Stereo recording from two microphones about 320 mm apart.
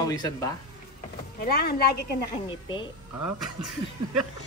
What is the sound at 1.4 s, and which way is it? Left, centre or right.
Speech, left.